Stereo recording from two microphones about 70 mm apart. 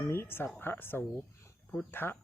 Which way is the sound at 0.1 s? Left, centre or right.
Left.